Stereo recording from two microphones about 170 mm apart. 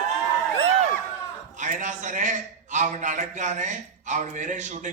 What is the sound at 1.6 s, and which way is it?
A man's voice, 50° right (ahead or behind).